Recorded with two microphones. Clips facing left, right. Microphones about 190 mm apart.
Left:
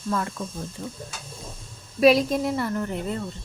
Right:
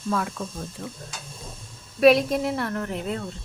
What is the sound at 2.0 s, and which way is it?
A woman's voice, centre (ahead or behind).